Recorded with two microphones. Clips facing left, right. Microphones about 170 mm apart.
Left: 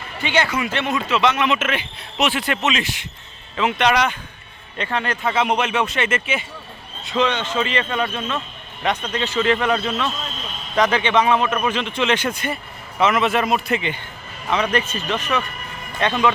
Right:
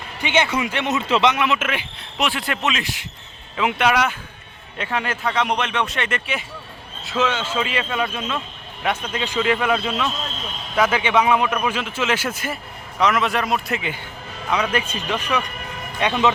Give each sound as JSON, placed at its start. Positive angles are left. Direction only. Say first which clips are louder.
{"t": 0.2, "sound": "speech", "louder": "even", "side_deg": -20}
{"t": 1.3, "sound": "a man's voice", "louder": "left 1 dB", "side_deg": -10}
{"t": 5.3, "sound": "a man's voice", "louder": "left 3 dB", "side_deg": 5}